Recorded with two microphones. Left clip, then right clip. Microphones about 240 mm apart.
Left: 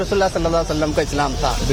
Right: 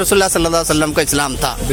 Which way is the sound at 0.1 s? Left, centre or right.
Right.